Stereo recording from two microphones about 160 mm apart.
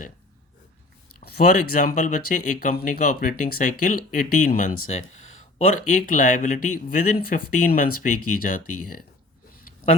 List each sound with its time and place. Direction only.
1.2 s speech: 60° left (ahead or behind)